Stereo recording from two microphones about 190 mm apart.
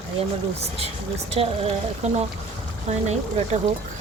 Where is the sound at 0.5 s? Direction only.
30° right (ahead or behind).